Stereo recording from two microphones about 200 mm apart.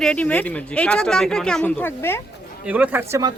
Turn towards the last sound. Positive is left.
turn(degrees=-15)  # may be behind; listen again after turning